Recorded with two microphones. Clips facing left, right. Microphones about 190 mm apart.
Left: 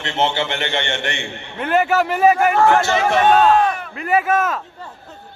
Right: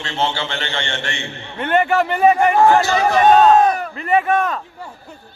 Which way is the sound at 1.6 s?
5° left (ahead or behind).